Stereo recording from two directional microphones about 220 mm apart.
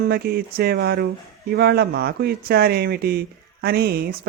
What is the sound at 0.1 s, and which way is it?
Speech, 45° right (ahead or behind).